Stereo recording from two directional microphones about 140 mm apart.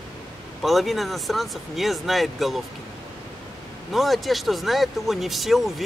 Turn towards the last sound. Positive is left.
turn(degrees=0)  # may be behind; listen again after turning